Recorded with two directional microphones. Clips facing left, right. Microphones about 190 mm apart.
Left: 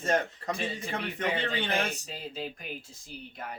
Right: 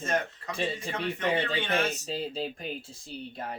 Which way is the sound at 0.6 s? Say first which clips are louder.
Right 8 dB; 35° right (ahead or behind).